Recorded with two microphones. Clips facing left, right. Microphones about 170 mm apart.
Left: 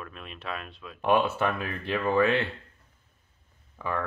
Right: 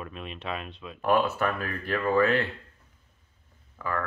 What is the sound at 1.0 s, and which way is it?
Speech, 25° left (ahead or behind).